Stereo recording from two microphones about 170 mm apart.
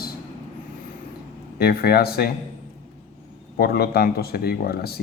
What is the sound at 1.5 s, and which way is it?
Speech, 65° left (ahead or behind).